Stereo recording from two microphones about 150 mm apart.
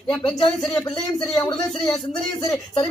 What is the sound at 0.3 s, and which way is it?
Speech, 30° left (ahead or behind).